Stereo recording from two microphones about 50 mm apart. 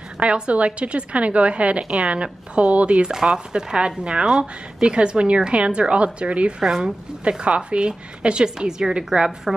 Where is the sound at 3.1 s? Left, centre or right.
Centre.